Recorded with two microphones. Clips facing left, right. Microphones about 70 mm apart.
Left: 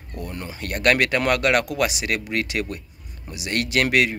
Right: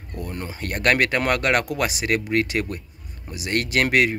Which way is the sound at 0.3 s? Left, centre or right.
Right.